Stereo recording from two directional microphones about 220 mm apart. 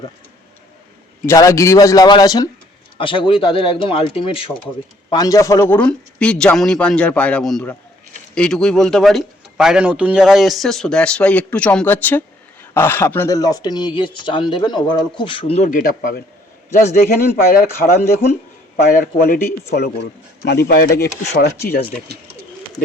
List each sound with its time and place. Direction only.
1.3 s a man's voice: 15° left (ahead or behind); by 16.2 s 40° left (ahead or behind)
17.3 s speech: 40° left (ahead or behind)